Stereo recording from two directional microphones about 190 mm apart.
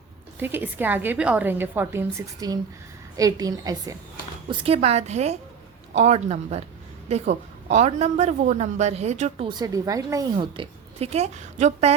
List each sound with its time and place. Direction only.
0.3 s a woman's voice: 10° right (ahead or behind)
4.4 s a woman's voice: 30° right (ahead or behind)
9.5 s a woman's voice: 20° right (ahead or behind); by 11.9 s 35° right (ahead or behind)